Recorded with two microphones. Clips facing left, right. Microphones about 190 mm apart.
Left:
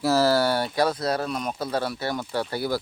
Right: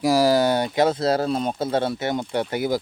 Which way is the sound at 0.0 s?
15° right (ahead or behind).